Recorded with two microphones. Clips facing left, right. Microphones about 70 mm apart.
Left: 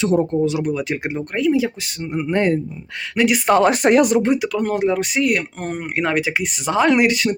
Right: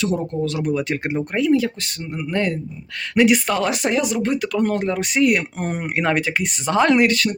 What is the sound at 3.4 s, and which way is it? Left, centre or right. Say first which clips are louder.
Speech: left 7 dB; left.